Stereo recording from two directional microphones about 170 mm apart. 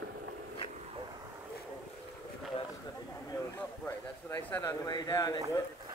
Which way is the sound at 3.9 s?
15° left (ahead or behind).